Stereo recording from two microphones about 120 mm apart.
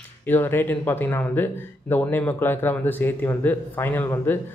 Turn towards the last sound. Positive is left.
turn(degrees=15)  # may be behind; listen again after turning